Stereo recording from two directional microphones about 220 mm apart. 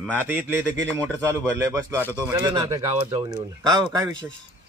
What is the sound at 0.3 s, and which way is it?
Speech, 10° right (ahead or behind).